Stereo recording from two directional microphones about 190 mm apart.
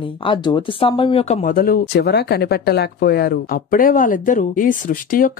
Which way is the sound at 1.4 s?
50° left (ahead or behind).